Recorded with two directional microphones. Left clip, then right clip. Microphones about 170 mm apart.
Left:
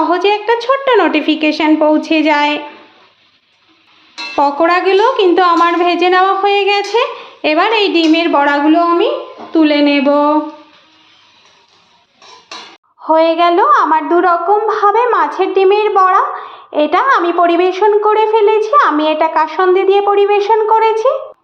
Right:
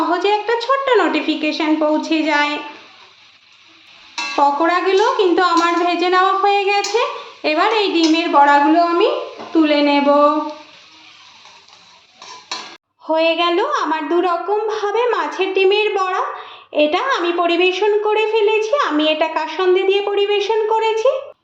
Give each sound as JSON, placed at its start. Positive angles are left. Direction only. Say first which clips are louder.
{"t": 0.1, "sound": "a woman's voice", "louder": "left 4 dB", "side_deg": 30}
{"t": 4.4, "sound": "a woman's voice", "louder": "left 4 dB", "side_deg": 40}
{"t": 13.1, "sound": "a woman's voice", "louder": "left 6 dB", "side_deg": 15}